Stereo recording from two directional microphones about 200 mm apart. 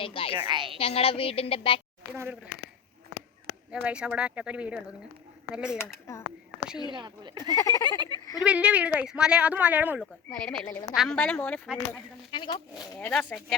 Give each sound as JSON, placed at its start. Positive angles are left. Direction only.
{"t": 0.0, "sound": "a woman's voice", "side_deg": 25}
{"t": 0.3, "sound": "speech", "side_deg": -25}
{"t": 0.8, "sound": "a woman's voice", "side_deg": 30}
{"t": 2.1, "sound": "speech", "side_deg": -10}
{"t": 3.7, "sound": "speech", "side_deg": -5}
{"t": 5.7, "sound": "a woman's voice", "side_deg": 10}
{"t": 6.9, "sound": "speech", "side_deg": -20}
{"t": 7.5, "sound": "a woman's voice", "side_deg": 15}
{"t": 7.9, "sound": "speech", "side_deg": -20}
{"t": 8.4, "sound": "speech", "side_deg": -5}
{"t": 10.3, "sound": "a woman's voice", "side_deg": 5}
{"t": 12.3, "sound": "a woman's voice", "side_deg": 25}
{"t": 13.0, "sound": "speech", "side_deg": 5}